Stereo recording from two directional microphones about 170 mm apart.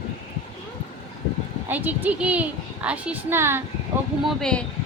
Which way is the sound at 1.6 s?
10° right (ahead or behind).